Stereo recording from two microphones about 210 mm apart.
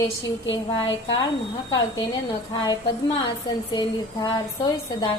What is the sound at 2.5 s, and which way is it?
A woman's voice, 20° left (ahead or behind).